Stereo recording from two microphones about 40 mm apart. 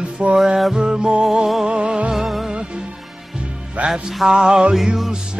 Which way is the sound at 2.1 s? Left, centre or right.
Centre.